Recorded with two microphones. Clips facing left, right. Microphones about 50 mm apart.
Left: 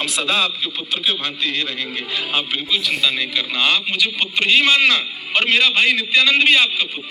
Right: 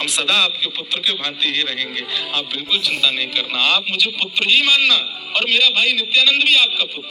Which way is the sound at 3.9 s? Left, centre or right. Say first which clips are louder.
Even; left.